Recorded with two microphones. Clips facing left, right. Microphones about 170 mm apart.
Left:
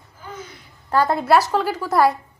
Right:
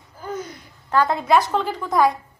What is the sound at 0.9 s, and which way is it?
A woman's voice, 10° left (ahead or behind).